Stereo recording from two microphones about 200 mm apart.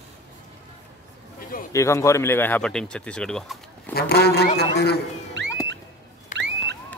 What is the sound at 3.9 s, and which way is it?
A man's voice, 55° left (ahead or behind).